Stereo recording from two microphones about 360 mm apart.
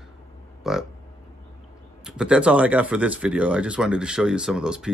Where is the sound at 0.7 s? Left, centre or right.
Centre.